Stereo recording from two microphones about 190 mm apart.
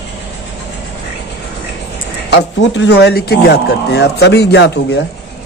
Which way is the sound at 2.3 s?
65° left (ahead or behind).